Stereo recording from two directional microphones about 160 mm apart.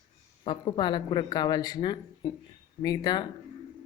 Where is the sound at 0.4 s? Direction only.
30° left (ahead or behind).